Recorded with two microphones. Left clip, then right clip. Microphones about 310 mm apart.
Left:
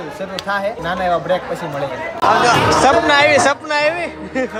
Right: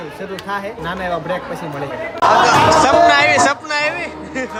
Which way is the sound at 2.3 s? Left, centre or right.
Centre.